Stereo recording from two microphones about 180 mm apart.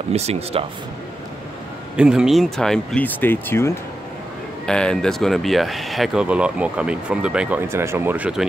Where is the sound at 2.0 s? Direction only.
5° right (ahead or behind).